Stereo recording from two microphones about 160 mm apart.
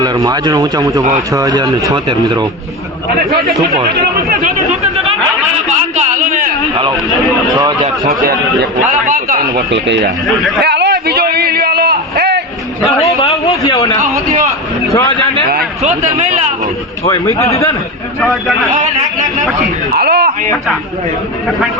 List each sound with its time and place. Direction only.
0.0 s speech: 25° right (ahead or behind)
4.3 s speech: 60° right (ahead or behind)
6.0 s a sound: 55° right (ahead or behind)
8.9 s a man's voice: 55° right (ahead or behind); by 10.1 s 90° right
10.6 s a sound: 90° right
13.7 s a man's voice: 20° left (ahead or behind)
15.8 s speech: 45° right (ahead or behind)
17.1 s a man's voice: 20° left (ahead or behind)
18.2 s a man's voice: centre (ahead or behind)
20.0 s a sound: 80° right